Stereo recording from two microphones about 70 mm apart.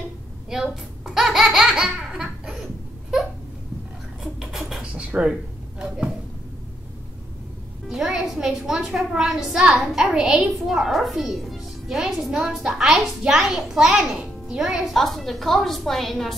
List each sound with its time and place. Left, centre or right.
0.5 s baby laughter: centre
4.2 s scratch: centre
4.9 s a sound: centre
7.9 s a woman's voice: centre